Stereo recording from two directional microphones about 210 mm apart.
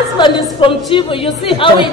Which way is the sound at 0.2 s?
25° left (ahead or behind).